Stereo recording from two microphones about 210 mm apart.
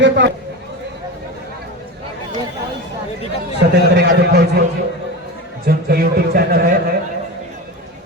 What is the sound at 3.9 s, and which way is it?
Speech, 50° right (ahead or behind).